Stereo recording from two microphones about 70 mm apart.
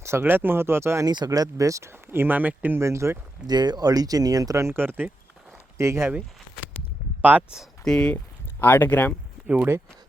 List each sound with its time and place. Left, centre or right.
0.0 s speech: right
1.0 s speech: right
1.9 s speech: right
2.7 s speech: right
3.4 s speech: right
4.5 s speech: right
5.7 s speech: right
7.2 s speech: right
7.9 s speech: centre
8.1 s speech: left